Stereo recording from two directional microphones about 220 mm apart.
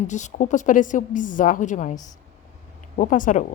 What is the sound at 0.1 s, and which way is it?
Speech, 35° left (ahead or behind).